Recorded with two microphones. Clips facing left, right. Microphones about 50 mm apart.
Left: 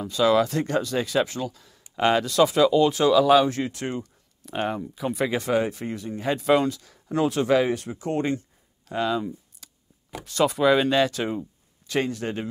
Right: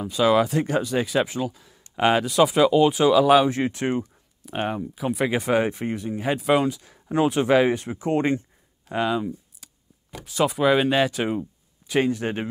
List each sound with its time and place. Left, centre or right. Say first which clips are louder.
0.0 s speech: right 1 dB; centre
4.4 s speech: right 1 dB; centre
5.5 s speech: right 2 dB; right
8.8 s a sound: right 1 dB; right
10.2 s speech: even; centre; by 12.4 s right